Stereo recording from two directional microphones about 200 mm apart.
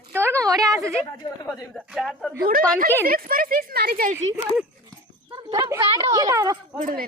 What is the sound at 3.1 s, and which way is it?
Speech, 45° right (ahead or behind).